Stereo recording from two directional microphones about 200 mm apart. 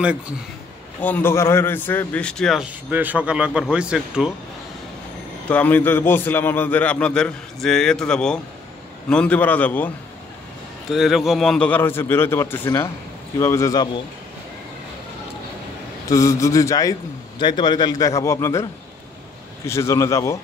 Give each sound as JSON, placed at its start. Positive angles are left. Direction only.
{"t": 1.0, "sound": "a man's voice", "side_deg": 10}
{"t": 5.5, "sound": "a man's voice", "side_deg": 10}
{"t": 10.9, "sound": "a man's voice", "side_deg": 0}
{"t": 16.1, "sound": "a man's voice", "side_deg": 15}